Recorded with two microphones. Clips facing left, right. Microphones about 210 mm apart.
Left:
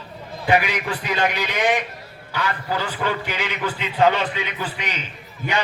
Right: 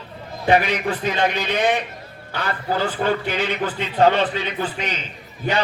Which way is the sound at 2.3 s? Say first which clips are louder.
Right 2 dB; 35° right (ahead or behind).